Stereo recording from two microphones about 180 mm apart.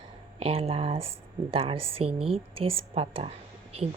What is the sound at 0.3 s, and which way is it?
Speech, 35° right (ahead or behind).